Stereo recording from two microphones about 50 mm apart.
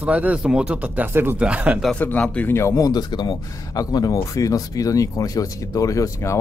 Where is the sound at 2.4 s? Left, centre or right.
Left.